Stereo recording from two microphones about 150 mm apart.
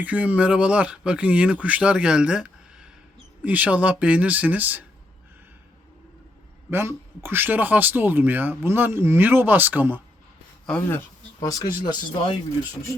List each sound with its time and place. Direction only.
0.0 s speech: 10° right (ahead or behind)
6.7 s speech: 15° right (ahead or behind)
10.7 s speech: 10° left (ahead or behind)
11.3 s speech: 25° left (ahead or behind)